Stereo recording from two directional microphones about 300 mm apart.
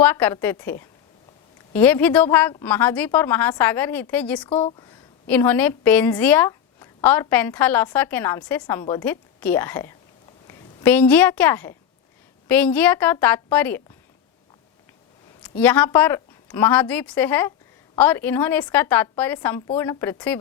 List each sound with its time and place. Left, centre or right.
0.0 s a woman's voice: centre
4.4 s speech: centre
5.3 s a woman's voice: centre
15.4 s a woman's voice: centre